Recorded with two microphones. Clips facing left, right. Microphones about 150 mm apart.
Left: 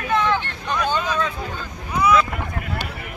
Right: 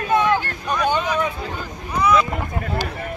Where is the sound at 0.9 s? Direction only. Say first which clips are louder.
Right 3 dB; 15° right (ahead or behind).